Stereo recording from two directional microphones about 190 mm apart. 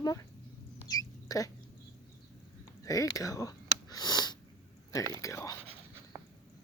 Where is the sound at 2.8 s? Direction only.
20° left (ahead or behind).